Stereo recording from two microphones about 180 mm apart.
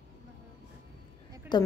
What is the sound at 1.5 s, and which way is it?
Speech, 25° left (ahead or behind).